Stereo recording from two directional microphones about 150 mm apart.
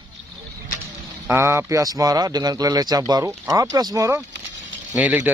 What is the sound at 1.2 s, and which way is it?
Speech, 15° right (ahead or behind).